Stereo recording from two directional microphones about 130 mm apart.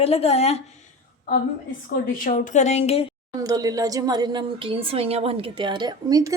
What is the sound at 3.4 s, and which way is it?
A woman's voice, 30° right (ahead or behind).